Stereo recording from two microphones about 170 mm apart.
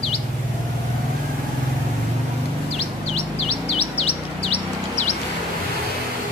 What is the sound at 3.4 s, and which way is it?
Chirp, 35° left (ahead or behind).